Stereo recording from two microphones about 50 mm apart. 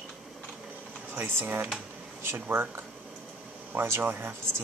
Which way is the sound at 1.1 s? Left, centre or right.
Right.